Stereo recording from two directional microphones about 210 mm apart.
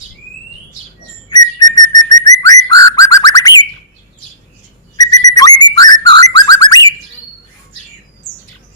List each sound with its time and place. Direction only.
1.3 s whistle: 20° left (ahead or behind)
2.4 s bird: 15° left (ahead or behind)
4.9 s whistle: 15° left (ahead or behind)